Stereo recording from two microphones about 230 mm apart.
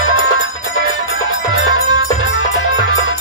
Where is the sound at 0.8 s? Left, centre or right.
Left.